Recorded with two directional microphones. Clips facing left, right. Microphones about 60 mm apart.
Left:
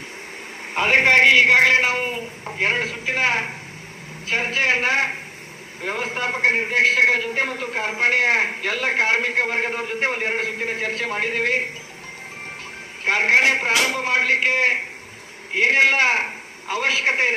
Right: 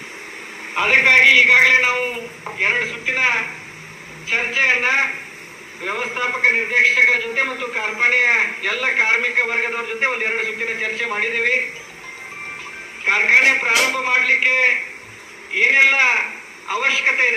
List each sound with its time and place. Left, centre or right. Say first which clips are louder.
0.7 s a man's voice: right 2 dB; centre
13.1 s a man's voice: right 2 dB; right